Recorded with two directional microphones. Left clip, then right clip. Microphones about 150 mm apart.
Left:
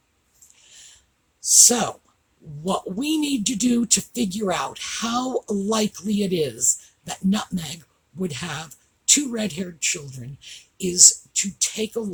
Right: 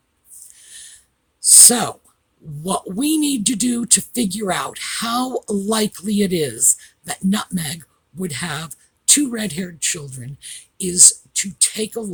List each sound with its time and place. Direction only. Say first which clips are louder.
1.6 s speech: right 3 dB; 60° right (ahead or behind)